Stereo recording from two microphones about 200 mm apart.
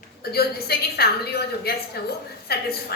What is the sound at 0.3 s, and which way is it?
A woman's voice, 50° left (ahead or behind).